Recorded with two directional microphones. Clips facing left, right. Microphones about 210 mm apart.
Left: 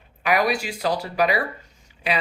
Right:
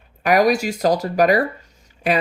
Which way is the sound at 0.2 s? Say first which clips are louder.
Right 6 dB; 45° right (ahead or behind).